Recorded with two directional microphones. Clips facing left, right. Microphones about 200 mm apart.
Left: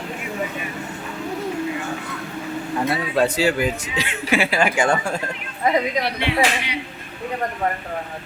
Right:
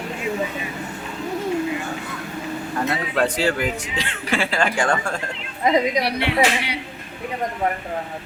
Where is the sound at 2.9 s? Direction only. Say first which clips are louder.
Left 2 dB; 10° left (ahead or behind).